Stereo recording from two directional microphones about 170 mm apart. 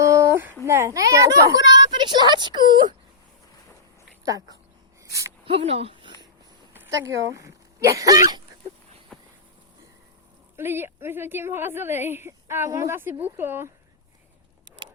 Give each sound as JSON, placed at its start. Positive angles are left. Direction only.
{"t": 0.0, "sound": "a sound", "side_deg": -15}
{"t": 0.6, "sound": "a woman's voice", "side_deg": -15}
{"t": 4.3, "sound": "a woman's voice", "side_deg": -20}
{"t": 5.5, "sound": "a sound", "side_deg": -35}
{"t": 7.3, "sound": "speech", "side_deg": -20}
{"t": 10.6, "sound": "a woman's voice", "side_deg": -15}